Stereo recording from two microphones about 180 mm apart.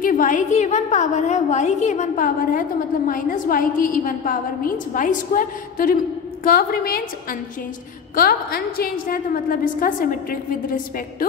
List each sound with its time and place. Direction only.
0.0 s a woman's voice: 45° left (ahead or behind)
8.2 s a woman's voice: 55° left (ahead or behind)